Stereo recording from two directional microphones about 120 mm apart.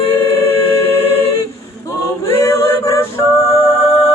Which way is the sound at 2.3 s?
25° left (ahead or behind).